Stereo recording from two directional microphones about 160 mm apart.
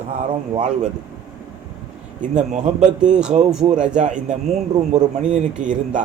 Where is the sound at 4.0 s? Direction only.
50° right (ahead or behind).